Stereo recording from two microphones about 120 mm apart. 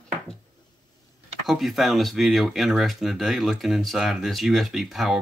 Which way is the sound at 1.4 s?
Centre (ahead or behind).